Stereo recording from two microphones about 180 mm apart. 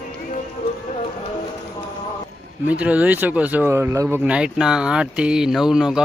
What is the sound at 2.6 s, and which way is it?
Speech, 5° right (ahead or behind).